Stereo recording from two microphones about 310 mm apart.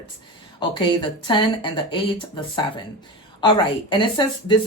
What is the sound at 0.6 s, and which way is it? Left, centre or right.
Speech, centre.